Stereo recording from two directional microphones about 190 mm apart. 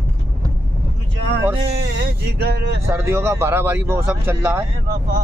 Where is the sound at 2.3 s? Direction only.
60° right (ahead or behind).